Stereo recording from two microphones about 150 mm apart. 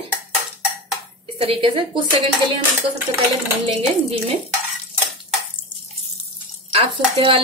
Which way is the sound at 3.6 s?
40° right (ahead or behind).